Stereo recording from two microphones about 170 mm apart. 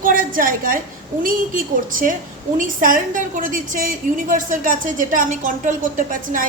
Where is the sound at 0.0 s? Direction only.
55° right (ahead or behind).